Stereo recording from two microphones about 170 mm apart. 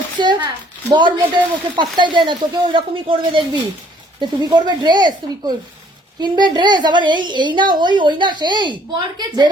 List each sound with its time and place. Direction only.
0.2 s a woman's voice: 25° right (ahead or behind)